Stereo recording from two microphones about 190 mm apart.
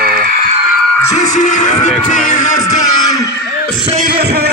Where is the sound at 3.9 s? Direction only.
45° right (ahead or behind).